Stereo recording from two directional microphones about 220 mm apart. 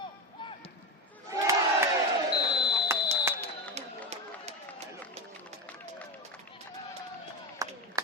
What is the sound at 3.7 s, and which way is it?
Run, 30° right (ahead or behind).